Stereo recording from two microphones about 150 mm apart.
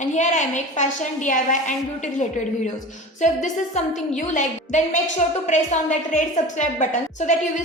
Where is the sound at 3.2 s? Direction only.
55° left (ahead or behind).